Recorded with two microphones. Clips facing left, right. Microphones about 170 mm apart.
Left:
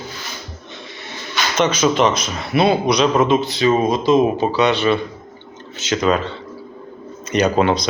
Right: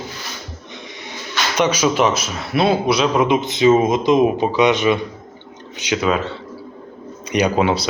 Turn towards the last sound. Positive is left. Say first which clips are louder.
# left 1 dB
turn(degrees=-10)  # may be behind; listen again after turning